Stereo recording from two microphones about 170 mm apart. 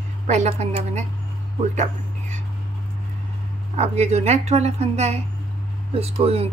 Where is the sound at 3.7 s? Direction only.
40° right (ahead or behind).